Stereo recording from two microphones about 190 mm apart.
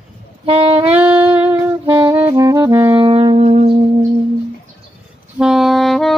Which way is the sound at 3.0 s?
30° right (ahead or behind).